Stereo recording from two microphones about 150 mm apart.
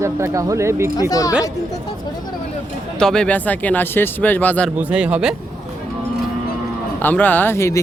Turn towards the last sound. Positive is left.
turn(degrees=20)  # may be behind; listen again after turning